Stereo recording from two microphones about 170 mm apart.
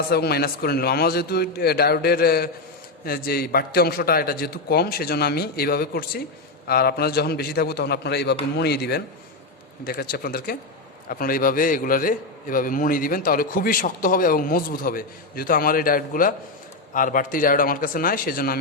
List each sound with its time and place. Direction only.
0.1 s a man's voice: 70° left (ahead or behind)